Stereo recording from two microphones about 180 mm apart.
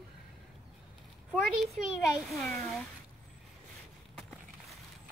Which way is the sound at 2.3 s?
10° left (ahead or behind).